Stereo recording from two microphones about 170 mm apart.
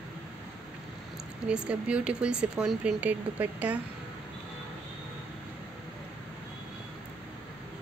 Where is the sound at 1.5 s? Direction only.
5° right (ahead or behind).